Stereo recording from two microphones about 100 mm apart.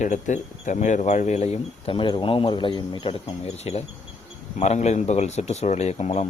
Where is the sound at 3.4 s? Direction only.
90° left.